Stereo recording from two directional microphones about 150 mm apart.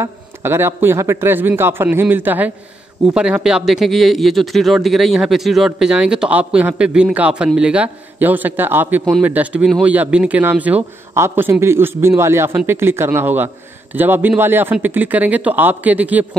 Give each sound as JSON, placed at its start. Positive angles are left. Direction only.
{"t": 0.0, "sound": "a man's voice", "side_deg": -15}